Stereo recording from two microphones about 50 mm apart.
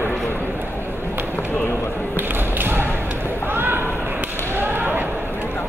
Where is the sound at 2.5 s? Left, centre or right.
Right.